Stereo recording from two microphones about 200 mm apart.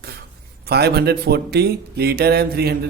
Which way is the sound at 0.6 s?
55° right (ahead or behind).